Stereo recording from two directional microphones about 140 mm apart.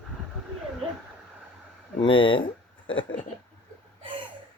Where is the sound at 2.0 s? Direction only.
35° left (ahead or behind).